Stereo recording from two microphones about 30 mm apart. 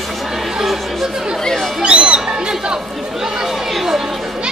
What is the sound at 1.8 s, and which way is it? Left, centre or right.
Music, right.